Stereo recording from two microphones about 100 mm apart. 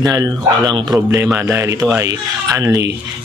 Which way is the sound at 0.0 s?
40° right (ahead or behind).